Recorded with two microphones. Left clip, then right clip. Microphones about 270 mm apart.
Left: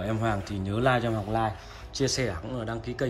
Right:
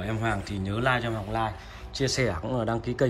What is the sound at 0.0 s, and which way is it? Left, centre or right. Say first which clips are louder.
A man's voice: even; centre.